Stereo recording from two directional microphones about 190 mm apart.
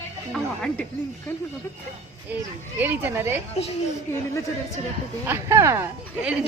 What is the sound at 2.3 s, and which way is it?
Speech, 10° right (ahead or behind).